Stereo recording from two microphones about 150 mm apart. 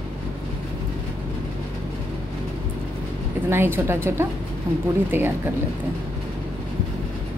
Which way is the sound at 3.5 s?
15° right (ahead or behind).